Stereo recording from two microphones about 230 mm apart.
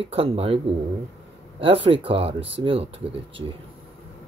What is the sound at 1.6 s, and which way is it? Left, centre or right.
Speech, right.